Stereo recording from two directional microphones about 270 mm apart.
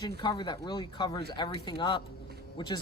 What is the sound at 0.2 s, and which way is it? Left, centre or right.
Speech, centre.